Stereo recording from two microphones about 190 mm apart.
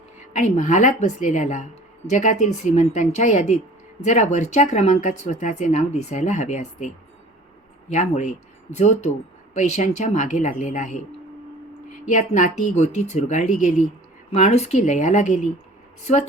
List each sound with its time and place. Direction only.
0.3 s speech: 40° left (ahead or behind)
12.0 s speech: 40° left (ahead or behind)